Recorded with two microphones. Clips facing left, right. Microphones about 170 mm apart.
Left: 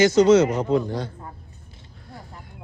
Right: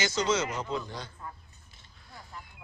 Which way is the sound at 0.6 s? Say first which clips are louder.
Left 12 dB; 55° left (ahead or behind).